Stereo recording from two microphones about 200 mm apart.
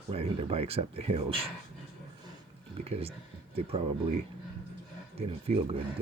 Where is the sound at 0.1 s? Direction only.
30° right (ahead or behind).